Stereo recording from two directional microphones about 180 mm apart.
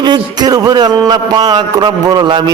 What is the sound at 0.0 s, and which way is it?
A man's voice, 25° right (ahead or behind).